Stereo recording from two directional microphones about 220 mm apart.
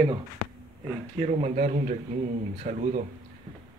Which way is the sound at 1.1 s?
30° right (ahead or behind).